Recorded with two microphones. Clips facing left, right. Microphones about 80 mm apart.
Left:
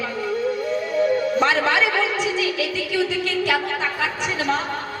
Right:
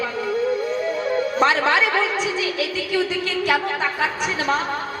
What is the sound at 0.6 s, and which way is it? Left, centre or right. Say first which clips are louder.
Music: left 2 dB; right.